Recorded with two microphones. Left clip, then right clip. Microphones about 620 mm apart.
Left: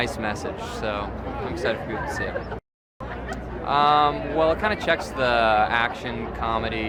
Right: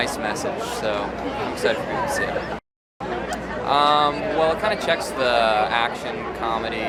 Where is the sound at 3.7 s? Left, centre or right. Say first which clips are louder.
Right 1 dB; left.